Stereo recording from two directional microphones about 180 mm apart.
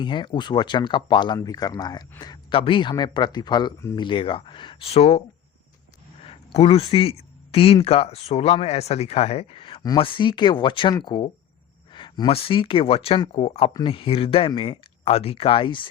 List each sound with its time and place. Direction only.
0.0 s speech: 25° left (ahead or behind)
6.2 s speech: 35° left (ahead or behind)